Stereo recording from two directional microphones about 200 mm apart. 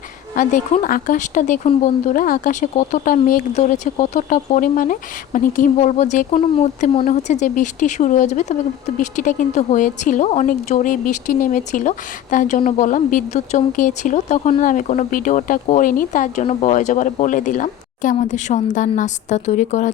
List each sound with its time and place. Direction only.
0.3 s a woman's voice: 40° left (ahead or behind)